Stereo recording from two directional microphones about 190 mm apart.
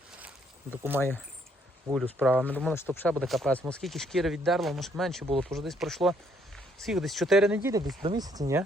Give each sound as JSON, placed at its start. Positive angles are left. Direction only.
{"t": 0.9, "sound": "speech", "side_deg": 10}
{"t": 1.9, "sound": "speech", "side_deg": 0}
{"t": 2.5, "sound": "speech", "side_deg": 5}
{"t": 7.6, "sound": "speech", "side_deg": -20}